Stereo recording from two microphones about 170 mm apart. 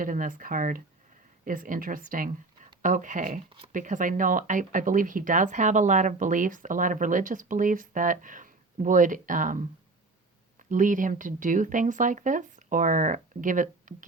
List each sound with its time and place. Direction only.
0.0 s speech: 55° right (ahead or behind)